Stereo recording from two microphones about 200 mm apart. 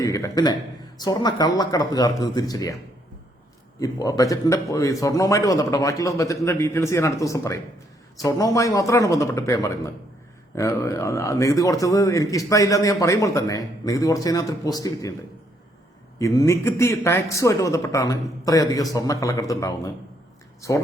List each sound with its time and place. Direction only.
0.0 s a man's voice: 15° left (ahead or behind)
3.8 s a man's voice: 15° left (ahead or behind)
16.1 s a man's voice: 15° left (ahead or behind)